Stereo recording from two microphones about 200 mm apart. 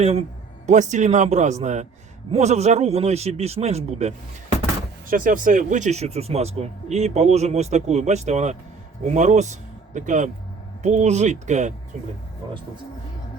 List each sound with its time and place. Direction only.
0.0 s speech: 30° right (ahead or behind)